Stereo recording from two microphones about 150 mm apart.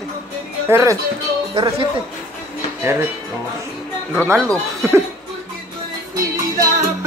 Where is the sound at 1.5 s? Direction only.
30° right (ahead or behind).